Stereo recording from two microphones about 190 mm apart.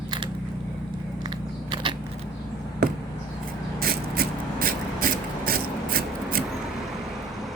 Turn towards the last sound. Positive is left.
turn(degrees=-50)  # may be behind; listen again after turning